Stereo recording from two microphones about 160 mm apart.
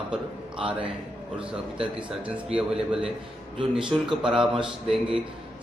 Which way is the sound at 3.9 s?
5° right (ahead or behind).